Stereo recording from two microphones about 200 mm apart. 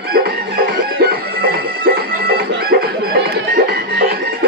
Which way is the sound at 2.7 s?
50° right (ahead or behind).